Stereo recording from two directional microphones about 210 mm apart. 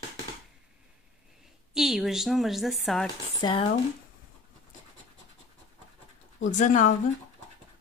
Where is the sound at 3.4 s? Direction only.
20° left (ahead or behind).